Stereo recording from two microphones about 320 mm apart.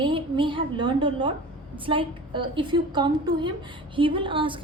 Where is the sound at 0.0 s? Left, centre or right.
Centre.